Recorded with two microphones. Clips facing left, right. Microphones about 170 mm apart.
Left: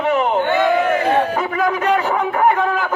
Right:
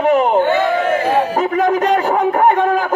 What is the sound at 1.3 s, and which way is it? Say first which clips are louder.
A man's voice: right 4 dB; 40° right (ahead or behind).